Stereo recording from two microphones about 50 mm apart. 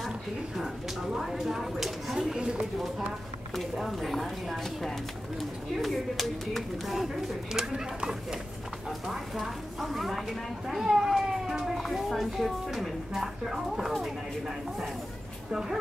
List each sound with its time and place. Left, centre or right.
0.6 s speech: centre
2.3 s speech: centre
3.5 s speech: centre
7.5 s speech: centre